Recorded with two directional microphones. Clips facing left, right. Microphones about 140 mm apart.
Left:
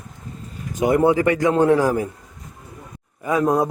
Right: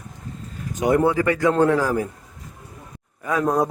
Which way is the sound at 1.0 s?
20° left (ahead or behind).